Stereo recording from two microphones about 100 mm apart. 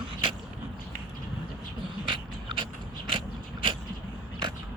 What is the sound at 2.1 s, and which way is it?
Mechanisms, 55° right (ahead or behind).